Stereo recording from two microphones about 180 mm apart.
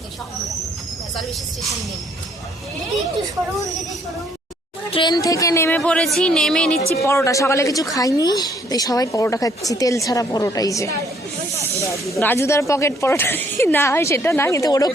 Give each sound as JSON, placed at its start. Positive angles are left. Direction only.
{"t": 4.9, "sound": "a woman's voice", "side_deg": 25}
{"t": 7.0, "sound": "a woman's voice", "side_deg": 15}
{"t": 12.1, "sound": "a woman's voice", "side_deg": 15}